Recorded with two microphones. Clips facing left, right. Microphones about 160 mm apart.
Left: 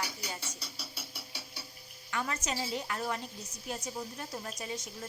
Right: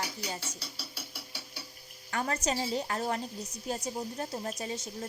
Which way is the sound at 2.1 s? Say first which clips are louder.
Right 4 dB; 35° right (ahead or behind).